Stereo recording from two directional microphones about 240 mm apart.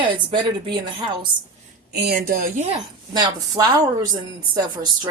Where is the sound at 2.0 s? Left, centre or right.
Right.